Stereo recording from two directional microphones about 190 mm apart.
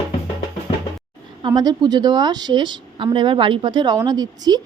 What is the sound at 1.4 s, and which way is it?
Speech, 20° right (ahead or behind).